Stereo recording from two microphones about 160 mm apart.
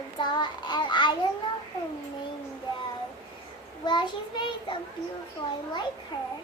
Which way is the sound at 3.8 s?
30° left (ahead or behind).